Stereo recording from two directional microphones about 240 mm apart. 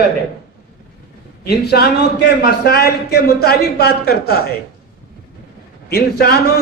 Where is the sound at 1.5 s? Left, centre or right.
Left.